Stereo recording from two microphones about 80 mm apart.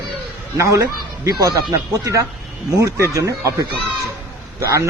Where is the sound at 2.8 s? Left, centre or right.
Right.